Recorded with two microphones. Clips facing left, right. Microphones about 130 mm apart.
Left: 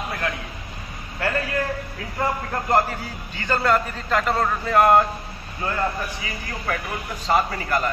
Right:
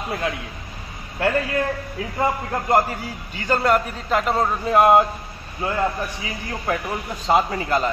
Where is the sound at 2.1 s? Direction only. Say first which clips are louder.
Right 2 dB; 10° right (ahead or behind).